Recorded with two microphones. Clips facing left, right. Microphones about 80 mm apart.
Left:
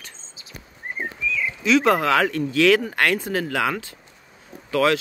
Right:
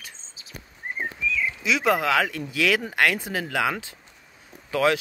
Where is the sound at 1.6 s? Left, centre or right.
Centre.